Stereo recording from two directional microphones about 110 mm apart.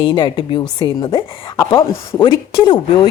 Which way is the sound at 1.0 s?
30° left (ahead or behind).